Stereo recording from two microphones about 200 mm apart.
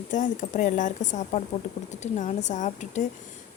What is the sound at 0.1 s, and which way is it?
A woman's voice, 40° left (ahead or behind).